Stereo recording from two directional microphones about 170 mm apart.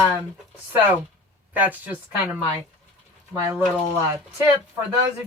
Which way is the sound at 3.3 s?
15° right (ahead or behind).